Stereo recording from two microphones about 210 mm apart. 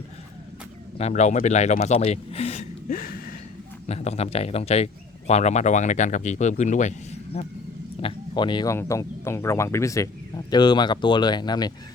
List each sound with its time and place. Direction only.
0.9 s speech: 30° left (ahead or behind)
2.9 s a sound: 45° left (ahead or behind)
3.8 s speech: 30° left (ahead or behind)